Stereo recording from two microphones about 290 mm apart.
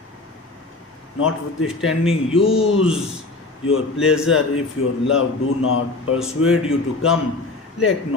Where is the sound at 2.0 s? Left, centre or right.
Centre.